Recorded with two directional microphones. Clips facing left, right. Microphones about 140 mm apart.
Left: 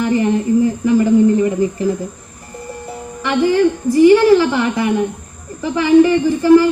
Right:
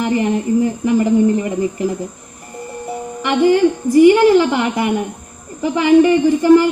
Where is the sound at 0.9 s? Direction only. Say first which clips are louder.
Left 2 dB; 20° right (ahead or behind).